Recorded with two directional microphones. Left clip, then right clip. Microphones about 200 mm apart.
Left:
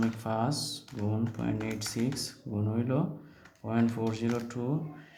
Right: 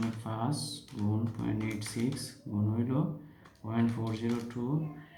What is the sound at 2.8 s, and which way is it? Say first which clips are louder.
Speech: left 4 dB; 45° left (ahead or behind).